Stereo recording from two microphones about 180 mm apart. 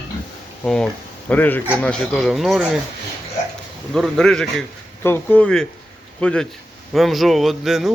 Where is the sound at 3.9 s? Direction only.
Centre (ahead or behind).